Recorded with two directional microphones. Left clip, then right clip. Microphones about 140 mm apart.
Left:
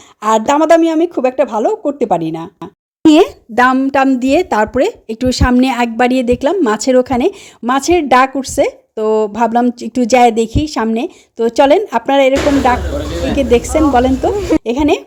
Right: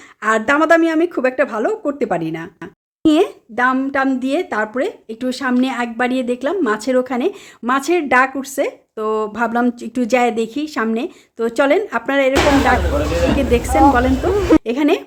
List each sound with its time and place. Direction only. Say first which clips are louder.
0.2 s speech: left 4 dB; 30° left (ahead or behind)
3.1 s a woman's voice: left 6 dB; 45° left (ahead or behind)
14.6 s speech: left 3 dB; 30° left (ahead or behind)